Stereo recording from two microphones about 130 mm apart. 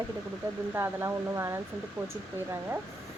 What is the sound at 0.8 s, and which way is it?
Speech, 20° right (ahead or behind).